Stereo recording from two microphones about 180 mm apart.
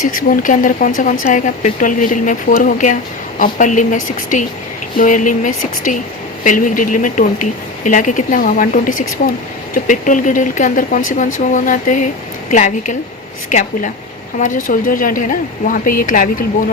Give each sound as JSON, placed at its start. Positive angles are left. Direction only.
{"t": 0.0, "sound": "speech", "side_deg": 50}